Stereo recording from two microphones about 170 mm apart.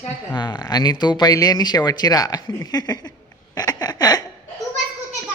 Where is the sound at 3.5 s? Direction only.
25° left (ahead or behind).